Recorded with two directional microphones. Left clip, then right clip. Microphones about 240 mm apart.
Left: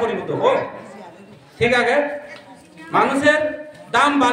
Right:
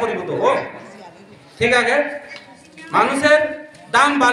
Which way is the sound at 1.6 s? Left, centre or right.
Centre.